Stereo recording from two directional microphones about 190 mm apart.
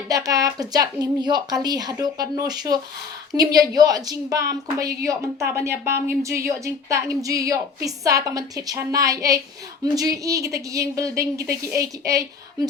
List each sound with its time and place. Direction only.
0.1 s a woman's voice: 20° right (ahead or behind)